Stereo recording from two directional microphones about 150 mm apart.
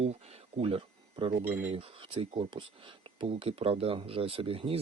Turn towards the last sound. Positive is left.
turn(degrees=-40)  # may be behind; listen again after turning